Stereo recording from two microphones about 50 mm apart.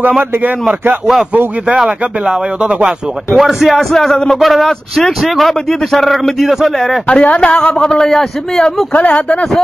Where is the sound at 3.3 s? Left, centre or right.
Centre.